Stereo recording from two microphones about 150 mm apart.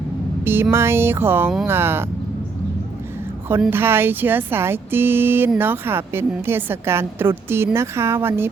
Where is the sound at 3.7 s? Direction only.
15° right (ahead or behind).